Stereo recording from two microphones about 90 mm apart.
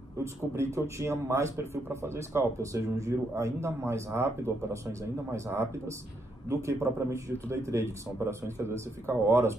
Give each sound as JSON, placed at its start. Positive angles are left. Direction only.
{"t": 0.2, "sound": "a man's voice", "side_deg": -30}